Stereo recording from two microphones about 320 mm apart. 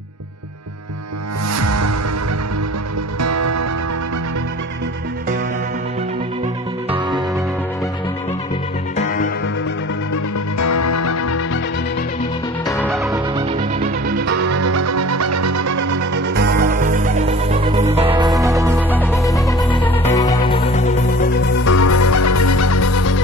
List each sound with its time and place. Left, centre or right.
1.5 s music: right
3.2 s music: right
8.9 s music: left
10.6 s music: left
12.6 s music: centre
14.3 s music: right
16.3 s music: right; by 18.9 s centre
18.9 s music: centre
21.6 s music: left